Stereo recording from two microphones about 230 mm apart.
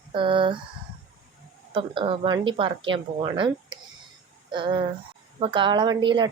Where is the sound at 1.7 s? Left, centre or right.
Right.